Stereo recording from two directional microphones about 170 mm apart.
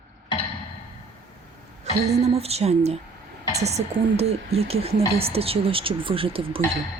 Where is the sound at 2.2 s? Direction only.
35° right (ahead or behind).